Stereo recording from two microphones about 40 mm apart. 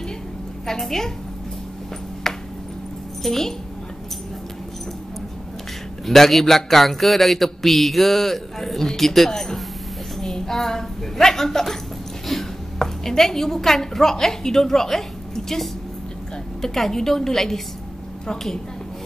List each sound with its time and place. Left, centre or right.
0.7 s a woman's voice: centre
2.3 s a sound: centre
3.2 s speech: centre
6.0 s a man's voice: centre